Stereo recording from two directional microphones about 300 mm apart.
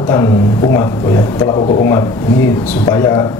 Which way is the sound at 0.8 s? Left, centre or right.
Centre.